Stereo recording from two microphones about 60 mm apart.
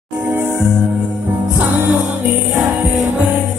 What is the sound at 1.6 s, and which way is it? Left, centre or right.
Music, right.